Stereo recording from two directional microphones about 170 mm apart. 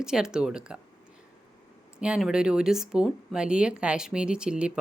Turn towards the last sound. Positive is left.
turn(degrees=-5)  # may be behind; listen again after turning